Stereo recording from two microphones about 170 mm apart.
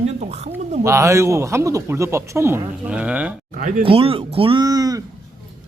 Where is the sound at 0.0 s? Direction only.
40° right (ahead or behind).